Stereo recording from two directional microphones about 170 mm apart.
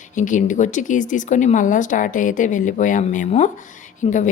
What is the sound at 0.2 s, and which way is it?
Speech, 50° left (ahead or behind).